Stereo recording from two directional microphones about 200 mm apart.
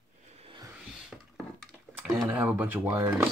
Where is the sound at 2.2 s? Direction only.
5° right (ahead or behind).